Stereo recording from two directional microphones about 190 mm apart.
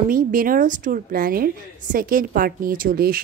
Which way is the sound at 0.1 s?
45° right (ahead or behind).